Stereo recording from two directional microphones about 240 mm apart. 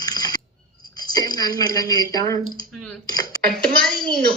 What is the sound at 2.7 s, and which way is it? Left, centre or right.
Speech, centre.